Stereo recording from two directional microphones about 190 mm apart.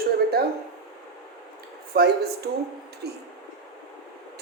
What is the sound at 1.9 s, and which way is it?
A man's voice, 55° right (ahead or behind).